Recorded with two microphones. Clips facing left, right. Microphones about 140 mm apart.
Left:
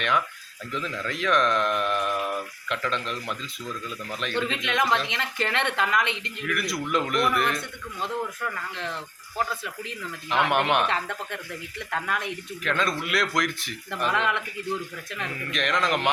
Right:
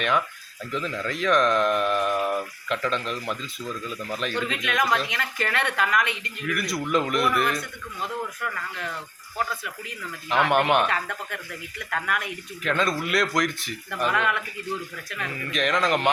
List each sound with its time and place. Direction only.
0.7 s speech: centre (ahead or behind)
4.4 s speech: 25° left (ahead or behind)
6.4 s speech: centre (ahead or behind)
8.4 s speech: 25° left (ahead or behind)
10.2 s speech: centre (ahead or behind)
10.8 s speech: 25° left (ahead or behind)
12.6 s speech: centre (ahead or behind)
14.1 s speech: 20° left (ahead or behind)
15.3 s speech: centre (ahead or behind)